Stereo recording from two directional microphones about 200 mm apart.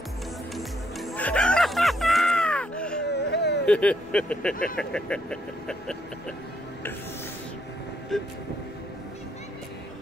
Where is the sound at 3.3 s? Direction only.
55° left (ahead or behind).